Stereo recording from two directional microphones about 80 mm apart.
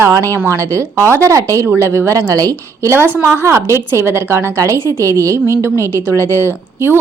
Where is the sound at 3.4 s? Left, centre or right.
Right.